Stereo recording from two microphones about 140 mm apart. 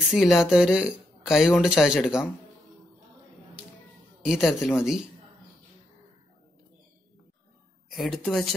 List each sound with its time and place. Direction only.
0.1 s speech: centre (ahead or behind)
4.2 s speech: centre (ahead or behind)
7.9 s speech: centre (ahead or behind)